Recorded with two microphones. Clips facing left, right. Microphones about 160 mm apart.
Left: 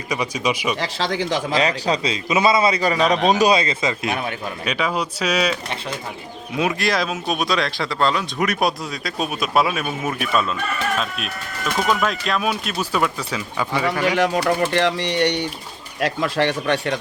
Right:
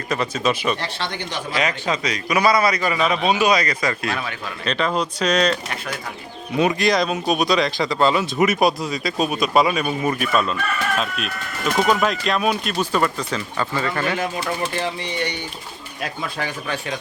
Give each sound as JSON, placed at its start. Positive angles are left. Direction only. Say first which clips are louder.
{"t": 0.1, "sound": "speech", "louder": "right 1 dB", "side_deg": 10}
{"t": 0.8, "sound": "speech", "louder": "left 5 dB", "side_deg": 90}
{"t": 1.5, "sound": "a man's voice", "louder": "left 1 dB", "side_deg": 35}
{"t": 3.5, "sound": "a man's voice", "louder": "left 1 dB", "side_deg": 25}
{"t": 4.6, "sound": "speech", "louder": "right 2 dB", "side_deg": 10}
{"t": 6.6, "sound": "speech", "louder": "right 3 dB", "side_deg": 0}
{"t": 14.2, "sound": "speech", "louder": "left 6 dB", "side_deg": 75}
{"t": 16.0, "sound": "speech", "louder": "left 8 dB", "side_deg": 85}